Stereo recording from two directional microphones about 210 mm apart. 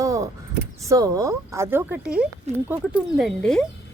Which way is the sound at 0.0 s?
15° right (ahead or behind).